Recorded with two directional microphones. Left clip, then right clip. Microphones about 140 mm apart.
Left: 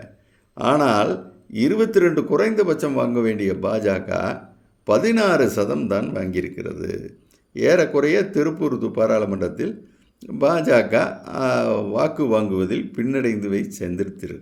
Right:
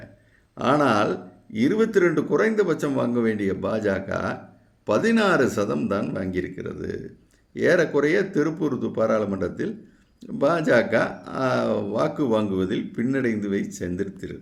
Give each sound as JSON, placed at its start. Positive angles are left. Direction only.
{"t": 0.5, "sound": "speech", "side_deg": 20}